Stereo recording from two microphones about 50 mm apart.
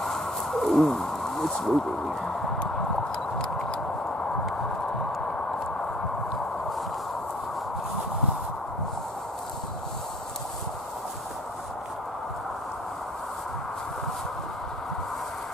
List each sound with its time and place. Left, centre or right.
0.0 s bird: centre
3.3 s tick: centre